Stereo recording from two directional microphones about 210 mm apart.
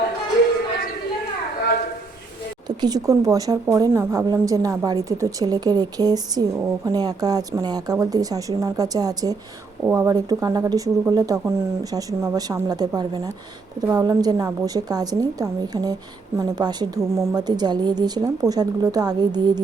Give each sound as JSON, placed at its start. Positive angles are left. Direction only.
{"t": 2.6, "sound": "a woman's voice", "side_deg": -20}